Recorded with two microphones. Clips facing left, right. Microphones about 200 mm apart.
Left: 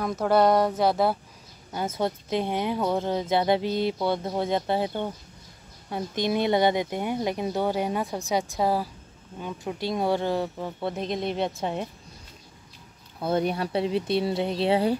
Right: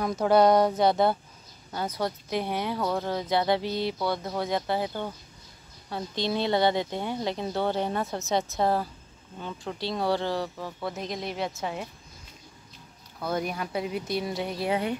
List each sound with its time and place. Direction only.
0.0 s a sound: centre (ahead or behind)
1.7 s speech: 20° left (ahead or behind)
13.2 s speech: 30° left (ahead or behind)